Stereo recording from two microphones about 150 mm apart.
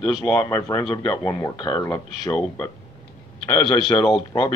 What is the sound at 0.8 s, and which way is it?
Speech, 30° left (ahead or behind).